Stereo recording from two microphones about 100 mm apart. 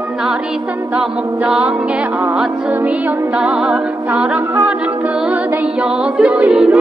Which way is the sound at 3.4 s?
10° right (ahead or behind).